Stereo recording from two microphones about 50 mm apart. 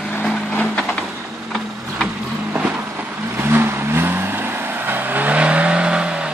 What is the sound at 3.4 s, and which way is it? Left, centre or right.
Vehicle, right.